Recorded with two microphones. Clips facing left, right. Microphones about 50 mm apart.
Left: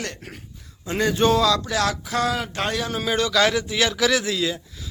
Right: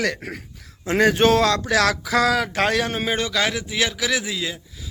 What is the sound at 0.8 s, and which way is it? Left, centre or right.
Speech, right.